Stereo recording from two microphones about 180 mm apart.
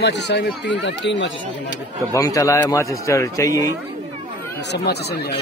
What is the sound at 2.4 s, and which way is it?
A man's voice, 15° left (ahead or behind).